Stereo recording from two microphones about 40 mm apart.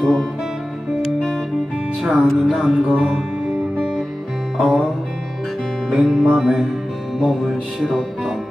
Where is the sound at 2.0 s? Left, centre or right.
Centre.